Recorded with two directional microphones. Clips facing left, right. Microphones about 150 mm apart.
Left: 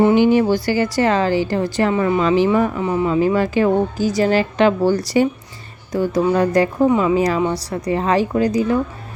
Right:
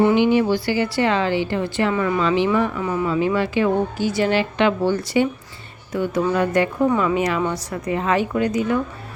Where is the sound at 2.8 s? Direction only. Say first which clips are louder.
Left 3 dB; 25° left (ahead or behind).